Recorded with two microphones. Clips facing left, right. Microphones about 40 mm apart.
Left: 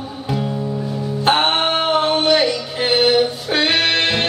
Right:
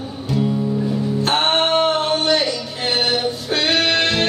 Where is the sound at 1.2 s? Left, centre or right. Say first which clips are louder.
Left 3 dB; centre.